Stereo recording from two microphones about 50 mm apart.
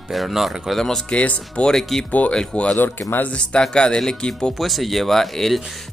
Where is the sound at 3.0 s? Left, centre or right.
Left.